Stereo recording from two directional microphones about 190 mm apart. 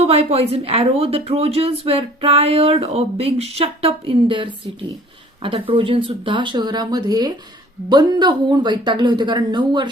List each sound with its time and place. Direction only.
0.0 s a woman's voice: 35° right (ahead or behind)